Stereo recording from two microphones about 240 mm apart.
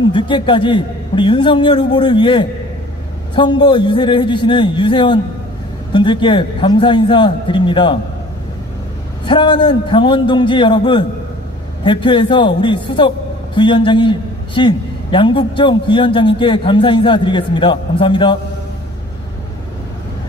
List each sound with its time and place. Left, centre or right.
0.1 s a man's voice: centre
9.2 s a man's voice: centre